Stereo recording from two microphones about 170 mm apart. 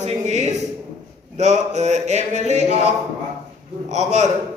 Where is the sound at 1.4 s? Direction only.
45° right (ahead or behind).